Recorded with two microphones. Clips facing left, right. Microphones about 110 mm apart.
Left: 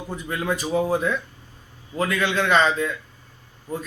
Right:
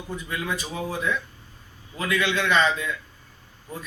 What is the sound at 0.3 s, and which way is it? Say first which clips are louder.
Speech: left 5 dB; 40° left (ahead or behind).